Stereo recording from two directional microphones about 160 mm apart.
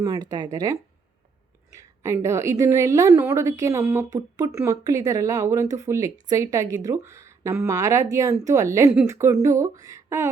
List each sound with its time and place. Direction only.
0.0 s a woman's voice: 25° right (ahead or behind)